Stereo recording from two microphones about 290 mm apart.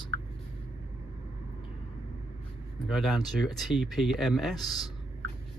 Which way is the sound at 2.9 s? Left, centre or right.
Centre.